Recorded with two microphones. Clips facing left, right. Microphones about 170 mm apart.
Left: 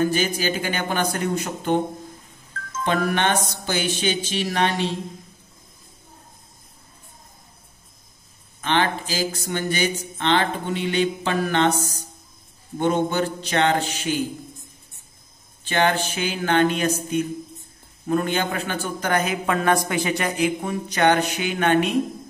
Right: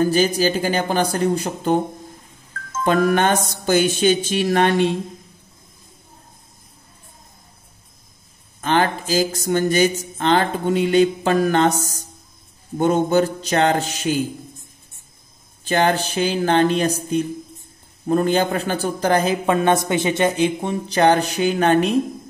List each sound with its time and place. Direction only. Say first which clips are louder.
0.0 s a man's voice: right 5 dB; 35° right (ahead or behind)
2.8 s speech: right 5 dB; 45° right (ahead or behind)
8.5 s a man's voice: right 3 dB; 40° right (ahead or behind)
15.6 s a man's voice: right 3 dB; 40° right (ahead or behind)